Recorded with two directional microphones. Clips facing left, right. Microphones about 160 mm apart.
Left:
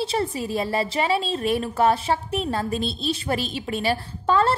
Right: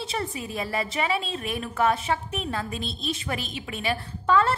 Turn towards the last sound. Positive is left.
turn(degrees=30)  # may be behind; listen again after turning